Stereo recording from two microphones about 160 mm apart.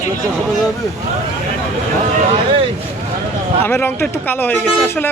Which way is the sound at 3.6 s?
15° left (ahead or behind).